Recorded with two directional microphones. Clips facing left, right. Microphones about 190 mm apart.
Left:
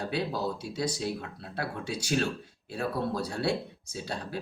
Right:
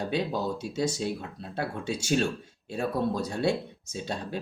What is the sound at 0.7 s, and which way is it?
Speech, 25° right (ahead or behind).